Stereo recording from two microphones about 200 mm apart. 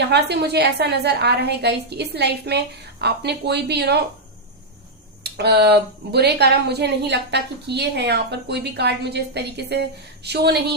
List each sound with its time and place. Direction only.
0.0 s a woman's voice: 55° right (ahead or behind)
5.2 s a woman's voice: 55° right (ahead or behind)